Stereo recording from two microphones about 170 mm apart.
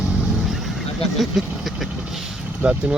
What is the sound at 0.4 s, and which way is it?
Vehicle, centre (ahead or behind).